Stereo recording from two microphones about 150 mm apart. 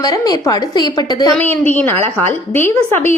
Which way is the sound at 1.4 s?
10° left (ahead or behind).